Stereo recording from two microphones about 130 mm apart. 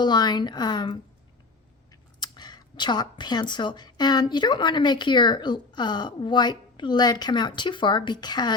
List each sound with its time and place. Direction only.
0.0 s speech: 35° left (ahead or behind)